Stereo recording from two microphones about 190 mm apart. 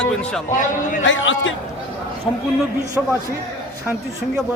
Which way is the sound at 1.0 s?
85° left.